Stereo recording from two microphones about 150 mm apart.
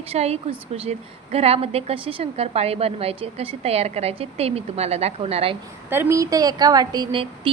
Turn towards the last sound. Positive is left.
turn(degrees=-30)  # may be behind; listen again after turning